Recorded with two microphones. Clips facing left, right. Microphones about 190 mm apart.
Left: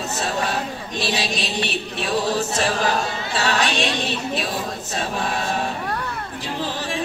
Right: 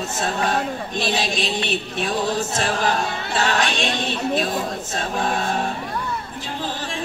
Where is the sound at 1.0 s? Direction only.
50° right (ahead or behind).